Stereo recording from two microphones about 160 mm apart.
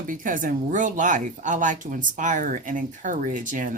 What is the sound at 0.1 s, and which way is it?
Speech, 55° right (ahead or behind).